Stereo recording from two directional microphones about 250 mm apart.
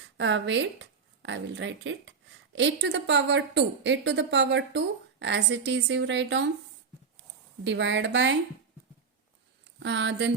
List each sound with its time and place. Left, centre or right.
0.2 s a woman's voice: right
7.6 s a woman's voice: right
9.8 s a woman's voice: right